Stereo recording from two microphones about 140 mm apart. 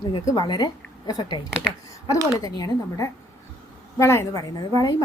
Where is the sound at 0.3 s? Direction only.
30° left (ahead or behind).